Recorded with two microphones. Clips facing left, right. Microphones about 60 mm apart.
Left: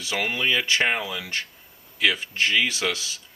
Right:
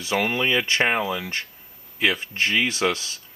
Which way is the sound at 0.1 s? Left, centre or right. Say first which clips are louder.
Right 3 dB; centre.